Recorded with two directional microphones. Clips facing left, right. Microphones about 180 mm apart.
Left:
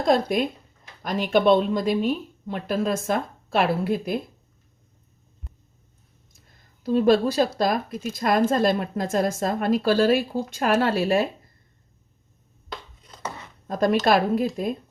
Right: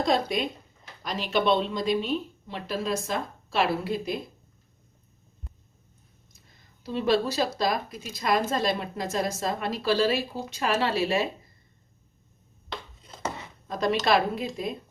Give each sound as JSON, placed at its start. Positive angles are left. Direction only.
{"t": 0.0, "sound": "a woman's voice", "side_deg": 55}
{"t": 6.8, "sound": "a woman's voice", "side_deg": 50}
{"t": 13.7, "sound": "a woman's voice", "side_deg": 50}